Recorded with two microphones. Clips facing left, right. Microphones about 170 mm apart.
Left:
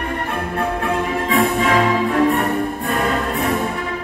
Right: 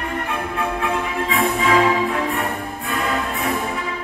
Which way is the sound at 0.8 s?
45° left (ahead or behind).